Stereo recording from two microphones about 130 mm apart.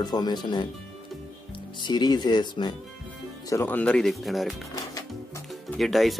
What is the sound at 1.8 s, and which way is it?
Speech, 35° left (ahead or behind).